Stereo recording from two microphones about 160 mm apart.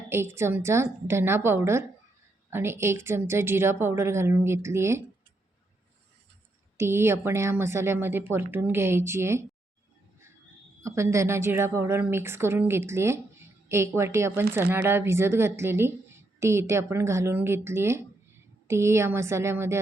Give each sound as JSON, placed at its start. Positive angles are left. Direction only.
{"t": 0.1, "sound": "speech", "side_deg": -15}
{"t": 6.7, "sound": "speech", "side_deg": -15}
{"t": 10.8, "sound": "speech", "side_deg": -15}